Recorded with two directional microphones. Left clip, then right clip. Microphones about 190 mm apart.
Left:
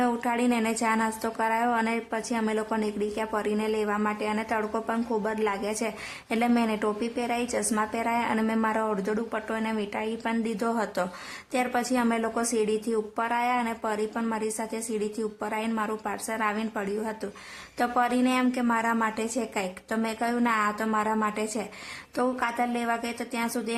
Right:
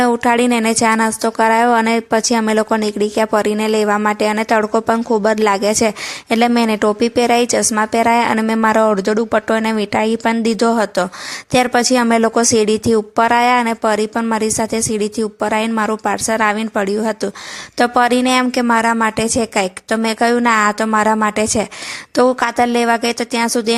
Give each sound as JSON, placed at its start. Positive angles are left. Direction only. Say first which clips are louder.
{"t": 0.0, "sound": "a woman's voice", "louder": "right 13 dB", "side_deg": -35}